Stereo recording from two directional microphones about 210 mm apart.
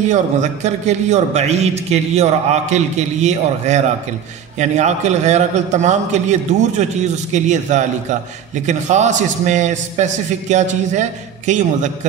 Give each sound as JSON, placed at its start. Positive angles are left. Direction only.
{"t": 0.0, "sound": "a man's voice", "side_deg": -35}